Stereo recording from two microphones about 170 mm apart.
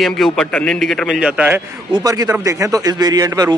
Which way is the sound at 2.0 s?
20° right (ahead or behind).